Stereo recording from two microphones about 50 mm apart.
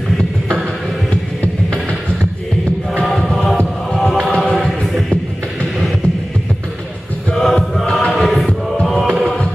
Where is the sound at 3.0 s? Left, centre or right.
Centre.